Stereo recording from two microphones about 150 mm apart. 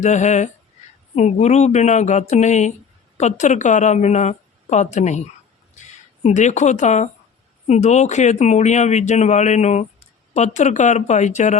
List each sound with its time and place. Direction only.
0.0 s a woman's voice: 50° left (ahead or behind)